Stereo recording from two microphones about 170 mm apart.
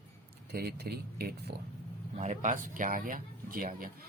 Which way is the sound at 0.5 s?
65° right (ahead or behind).